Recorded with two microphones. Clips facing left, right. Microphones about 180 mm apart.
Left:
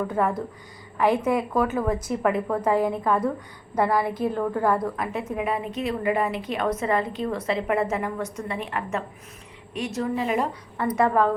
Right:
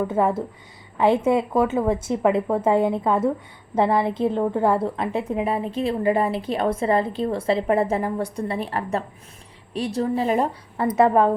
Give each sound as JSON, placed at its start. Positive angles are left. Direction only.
{"t": 0.1, "sound": "a woman's voice", "side_deg": -25}